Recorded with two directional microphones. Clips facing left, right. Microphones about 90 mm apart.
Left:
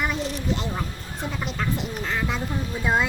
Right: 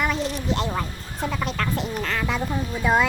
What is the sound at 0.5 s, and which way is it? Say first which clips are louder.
Speech: right 5 dB; 75° right (ahead or behind).